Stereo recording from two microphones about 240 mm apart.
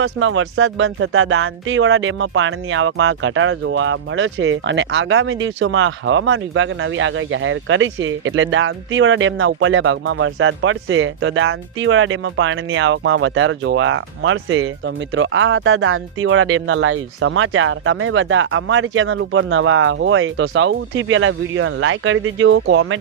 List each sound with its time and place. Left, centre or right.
0.0 s speech: right